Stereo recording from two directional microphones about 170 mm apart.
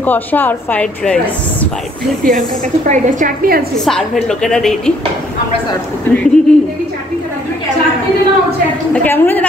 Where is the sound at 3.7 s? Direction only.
Centre (ahead or behind).